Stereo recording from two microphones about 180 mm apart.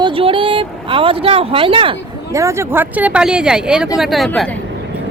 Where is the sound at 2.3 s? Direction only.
15° right (ahead or behind); by 4.5 s 5° left (ahead or behind).